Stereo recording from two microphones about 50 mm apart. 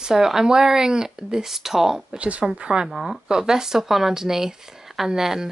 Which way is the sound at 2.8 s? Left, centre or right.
Centre.